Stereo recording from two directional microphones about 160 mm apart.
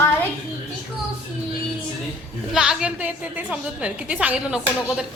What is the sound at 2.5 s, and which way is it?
A woman's voice, 5° right (ahead or behind).